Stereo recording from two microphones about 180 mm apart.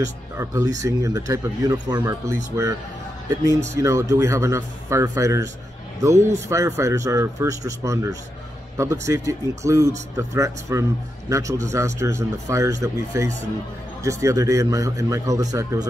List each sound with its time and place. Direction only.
0.4 s speech: 20° right (ahead or behind)